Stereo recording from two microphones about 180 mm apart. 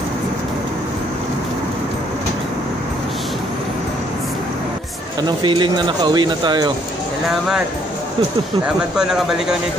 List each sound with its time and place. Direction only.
5.4 s speech: 25° right (ahead or behind)
7.2 s speech: 5° right (ahead or behind)
8.6 s speech: 5° right (ahead or behind)